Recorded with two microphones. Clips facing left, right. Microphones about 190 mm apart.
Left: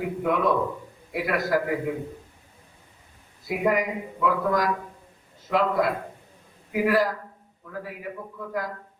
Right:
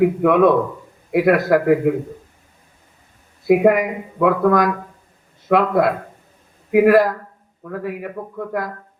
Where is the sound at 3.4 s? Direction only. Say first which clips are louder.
Right 10 dB; 60° right (ahead or behind).